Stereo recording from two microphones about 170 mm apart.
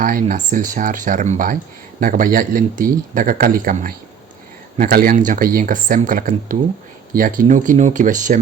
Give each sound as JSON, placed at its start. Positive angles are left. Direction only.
{"t": 0.0, "sound": "speech", "side_deg": -55}